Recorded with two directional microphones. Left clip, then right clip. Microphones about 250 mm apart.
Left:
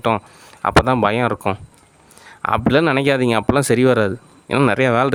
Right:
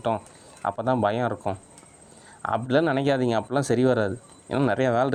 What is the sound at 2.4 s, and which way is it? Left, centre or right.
Speech, left.